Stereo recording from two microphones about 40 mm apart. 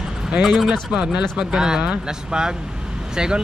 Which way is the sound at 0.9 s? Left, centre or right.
Right.